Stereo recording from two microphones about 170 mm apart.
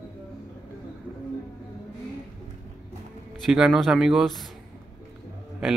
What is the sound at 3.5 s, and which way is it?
Speech, centre (ahead or behind).